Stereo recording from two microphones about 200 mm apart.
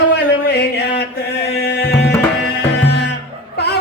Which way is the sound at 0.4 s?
55° left (ahead or behind).